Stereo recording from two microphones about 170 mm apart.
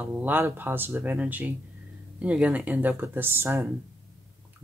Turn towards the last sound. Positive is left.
turn(degrees=-15)  # may be behind; listen again after turning